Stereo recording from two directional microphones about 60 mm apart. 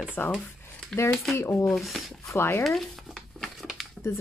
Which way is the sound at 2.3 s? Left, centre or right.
Left.